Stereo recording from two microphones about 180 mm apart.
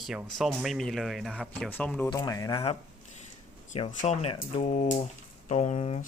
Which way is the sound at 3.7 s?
40° left (ahead or behind).